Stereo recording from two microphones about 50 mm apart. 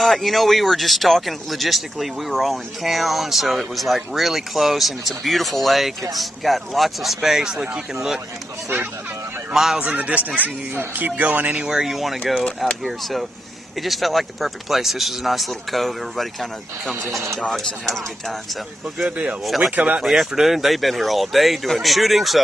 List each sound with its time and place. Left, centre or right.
0.0 s speech: centre
9.5 s speech: centre
9.9 s speech: right
11.7 s speech: centre
17.0 s speech: right
17.5 s speech: centre
19.7 s speech: right
20.1 s speech: centre